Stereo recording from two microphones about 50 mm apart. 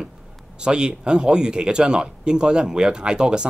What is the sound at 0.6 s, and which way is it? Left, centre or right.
Speech, centre.